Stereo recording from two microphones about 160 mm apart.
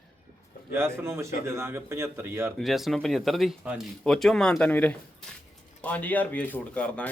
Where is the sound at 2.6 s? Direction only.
Centre (ahead or behind).